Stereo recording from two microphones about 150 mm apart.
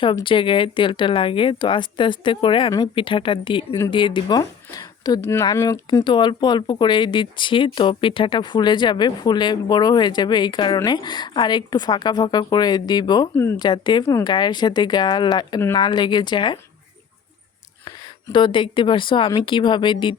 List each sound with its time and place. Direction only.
0.0 s a woman's voice: 35° left (ahead or behind)
13.3 s speech: 15° left (ahead or behind)
13.6 s speech: 30° left (ahead or behind)
17.8 s a woman's voice: 30° left (ahead or behind)